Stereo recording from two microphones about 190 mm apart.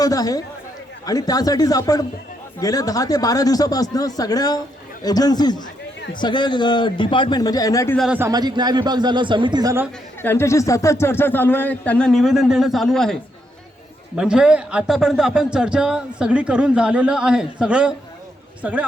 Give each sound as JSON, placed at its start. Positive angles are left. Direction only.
{"t": 0.0, "sound": "speech", "side_deg": 20}
{"t": 7.9, "sound": "speech", "side_deg": 0}
{"t": 8.2, "sound": "a man's voice", "side_deg": -20}
{"t": 10.2, "sound": "speech", "side_deg": 10}
{"t": 14.2, "sound": "speech", "side_deg": -5}